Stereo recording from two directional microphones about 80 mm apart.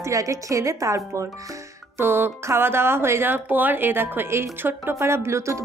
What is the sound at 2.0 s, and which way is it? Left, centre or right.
A woman's voice, right.